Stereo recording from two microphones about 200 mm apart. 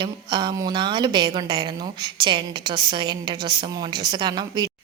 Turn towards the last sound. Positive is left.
turn(degrees=-20)  # may be behind; listen again after turning